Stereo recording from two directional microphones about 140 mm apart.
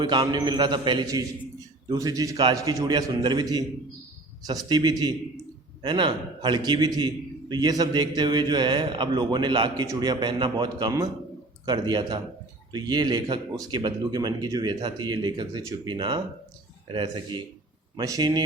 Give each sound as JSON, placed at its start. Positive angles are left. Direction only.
{"t": 0.0, "sound": "a man's voice", "side_deg": -30}